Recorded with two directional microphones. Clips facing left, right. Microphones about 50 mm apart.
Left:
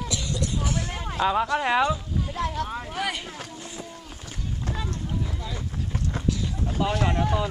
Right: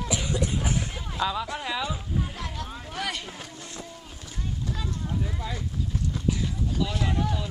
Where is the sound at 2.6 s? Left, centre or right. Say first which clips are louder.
Left 7 dB; left.